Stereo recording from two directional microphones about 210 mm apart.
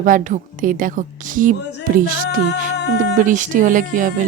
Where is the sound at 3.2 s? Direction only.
40° right (ahead or behind).